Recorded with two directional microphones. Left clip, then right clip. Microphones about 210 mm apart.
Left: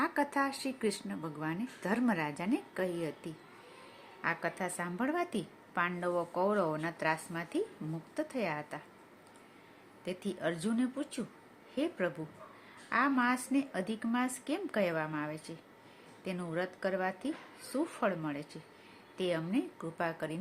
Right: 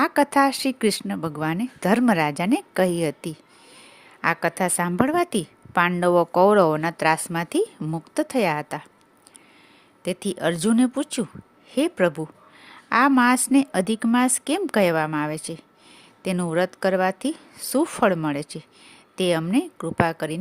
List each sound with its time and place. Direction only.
0.0 s a woman's voice: 45° right (ahead or behind)
10.0 s a woman's voice: 50° right (ahead or behind)